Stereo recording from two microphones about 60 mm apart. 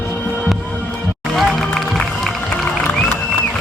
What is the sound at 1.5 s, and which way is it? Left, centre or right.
Music, centre.